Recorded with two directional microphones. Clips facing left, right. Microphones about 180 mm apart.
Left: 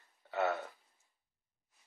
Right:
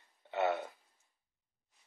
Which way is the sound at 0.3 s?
20° right (ahead or behind).